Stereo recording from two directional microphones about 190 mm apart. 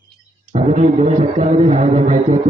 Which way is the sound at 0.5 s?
35° right (ahead or behind).